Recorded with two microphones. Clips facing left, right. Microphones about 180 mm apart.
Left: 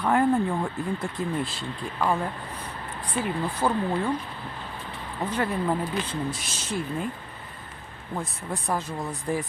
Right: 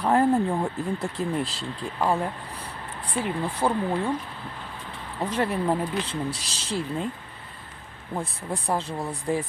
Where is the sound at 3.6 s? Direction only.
5° right (ahead or behind).